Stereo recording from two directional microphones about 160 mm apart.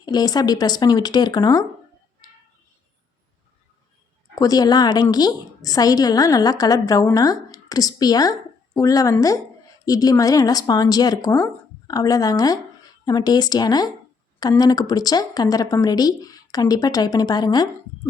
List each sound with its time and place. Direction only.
0.0 s a woman's voice: 25° left (ahead or behind)
4.4 s a woman's voice: 25° left (ahead or behind)